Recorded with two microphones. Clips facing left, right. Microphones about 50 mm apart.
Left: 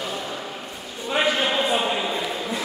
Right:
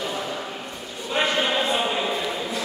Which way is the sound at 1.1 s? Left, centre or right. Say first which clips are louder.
Left 1 dB; centre.